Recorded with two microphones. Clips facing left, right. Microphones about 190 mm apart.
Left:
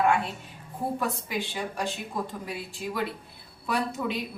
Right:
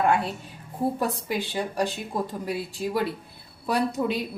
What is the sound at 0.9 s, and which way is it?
A woman's voice, 35° right (ahead or behind).